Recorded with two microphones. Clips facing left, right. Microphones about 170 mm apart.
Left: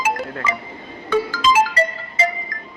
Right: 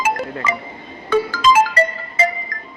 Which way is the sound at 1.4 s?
55° right (ahead or behind).